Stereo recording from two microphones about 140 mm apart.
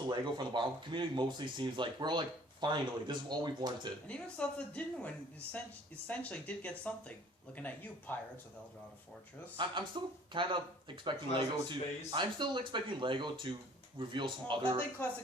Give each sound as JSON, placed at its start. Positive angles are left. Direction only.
{"t": 0.1, "sound": "speech", "side_deg": -35}
{"t": 4.0, "sound": "speech", "side_deg": 10}
{"t": 9.6, "sound": "speech", "side_deg": -35}
{"t": 11.3, "sound": "a man's voice", "side_deg": 50}
{"t": 11.7, "sound": "speech", "side_deg": -35}